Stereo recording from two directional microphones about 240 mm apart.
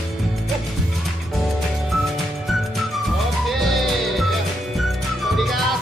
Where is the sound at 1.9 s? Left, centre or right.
Centre.